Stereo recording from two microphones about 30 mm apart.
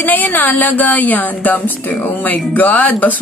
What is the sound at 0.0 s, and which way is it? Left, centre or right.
Speech, left.